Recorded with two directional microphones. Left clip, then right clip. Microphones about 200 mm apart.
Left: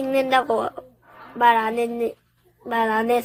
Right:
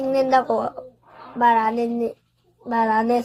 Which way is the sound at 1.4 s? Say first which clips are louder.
Even; 45° left (ahead or behind).